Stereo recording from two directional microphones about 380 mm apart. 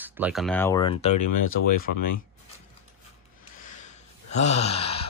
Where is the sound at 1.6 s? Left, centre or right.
Left.